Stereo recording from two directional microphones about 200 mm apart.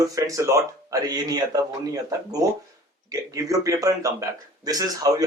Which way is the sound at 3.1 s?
15° right (ahead or behind).